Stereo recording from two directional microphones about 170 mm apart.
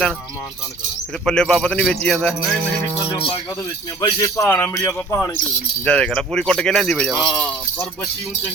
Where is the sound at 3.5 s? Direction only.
20° left (ahead or behind).